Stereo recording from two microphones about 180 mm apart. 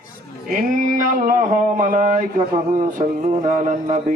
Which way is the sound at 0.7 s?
50° right (ahead or behind).